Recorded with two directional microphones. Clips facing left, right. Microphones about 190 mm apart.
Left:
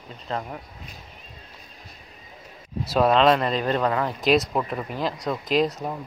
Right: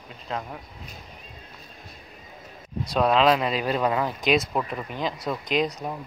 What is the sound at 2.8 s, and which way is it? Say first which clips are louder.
Speech: left 2 dB; centre (ahead or behind).